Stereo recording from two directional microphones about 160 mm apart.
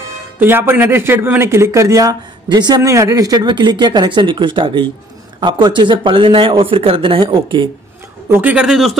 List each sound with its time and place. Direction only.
0.4 s speech: 15° right (ahead or behind); by 7.7 s 30° right (ahead or behind)
8.3 s speech: 10° right (ahead or behind)